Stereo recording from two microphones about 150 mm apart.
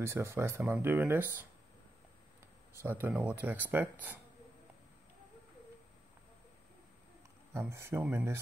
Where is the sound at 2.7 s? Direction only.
15° right (ahead or behind).